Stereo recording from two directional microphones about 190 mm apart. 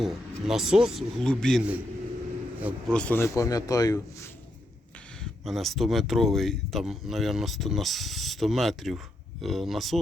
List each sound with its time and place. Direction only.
0.0 s a man's voice: centre (ahead or behind)
2.9 s a man's voice: 5° left (ahead or behind)
5.2 s speech: centre (ahead or behind)